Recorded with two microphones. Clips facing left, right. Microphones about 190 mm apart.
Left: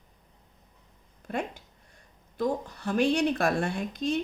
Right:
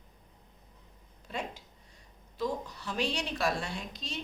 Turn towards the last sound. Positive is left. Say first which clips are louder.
# left 11 dB
turn(degrees=55)  # may be behind; listen again after turning